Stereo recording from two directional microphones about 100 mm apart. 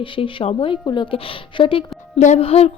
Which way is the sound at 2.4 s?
80° left.